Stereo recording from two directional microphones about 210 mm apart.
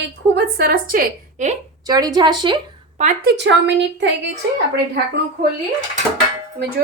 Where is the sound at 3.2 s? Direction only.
55° right (ahead or behind).